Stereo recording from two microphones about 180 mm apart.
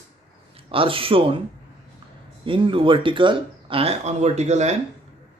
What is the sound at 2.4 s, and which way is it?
Speech, 30° right (ahead or behind).